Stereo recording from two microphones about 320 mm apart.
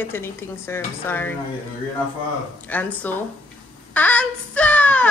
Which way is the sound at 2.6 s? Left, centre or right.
Centre.